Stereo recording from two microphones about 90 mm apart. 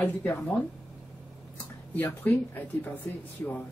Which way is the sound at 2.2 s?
20° left (ahead or behind).